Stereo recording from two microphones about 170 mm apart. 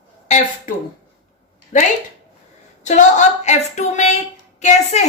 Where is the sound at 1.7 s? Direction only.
50° left (ahead or behind).